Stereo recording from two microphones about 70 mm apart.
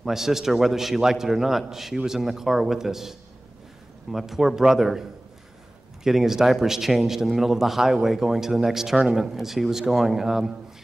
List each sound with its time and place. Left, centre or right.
0.0 s a man's voice: centre
6.0 s a man's voice: centre